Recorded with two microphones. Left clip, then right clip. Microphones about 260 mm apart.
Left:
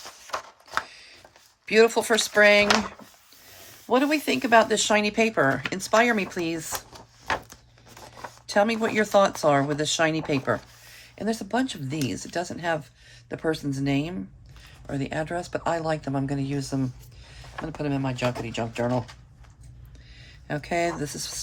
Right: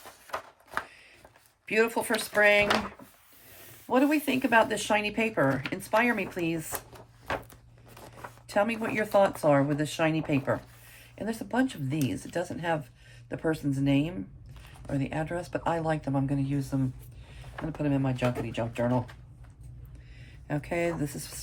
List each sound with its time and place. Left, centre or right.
0.3 s a sound: left
1.6 s speech: centre
3.8 s speech: centre
6.7 s a sound: left
8.4 s speech: centre
20.5 s speech: centre